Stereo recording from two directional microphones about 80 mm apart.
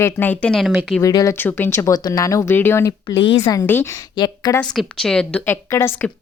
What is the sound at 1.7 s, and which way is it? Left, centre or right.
Speech, left.